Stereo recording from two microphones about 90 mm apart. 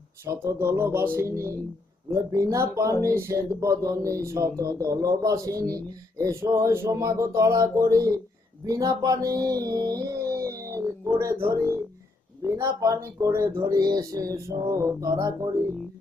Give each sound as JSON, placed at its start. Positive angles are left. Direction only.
{"t": 0.3, "sound": "speech", "side_deg": -30}
{"t": 8.6, "sound": "a sound", "side_deg": -40}
{"t": 12.4, "sound": "speech", "side_deg": -30}